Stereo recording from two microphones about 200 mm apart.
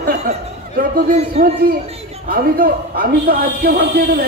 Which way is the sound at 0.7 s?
45° right (ahead or behind).